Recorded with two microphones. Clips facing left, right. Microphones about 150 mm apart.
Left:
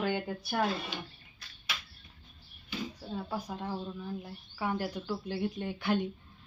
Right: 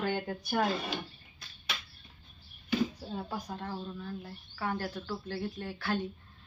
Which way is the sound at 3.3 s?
10° left (ahead or behind).